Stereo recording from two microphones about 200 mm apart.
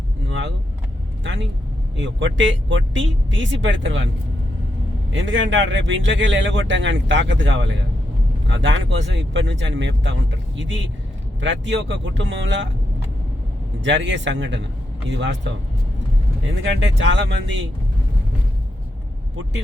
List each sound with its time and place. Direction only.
0.3 s speech: 65° right (ahead or behind)
5.1 s speech: 65° right (ahead or behind)
11.3 s speech: 65° right (ahead or behind)
13.8 s speech: 65° right (ahead or behind)
16.6 s speech: 65° right (ahead or behind)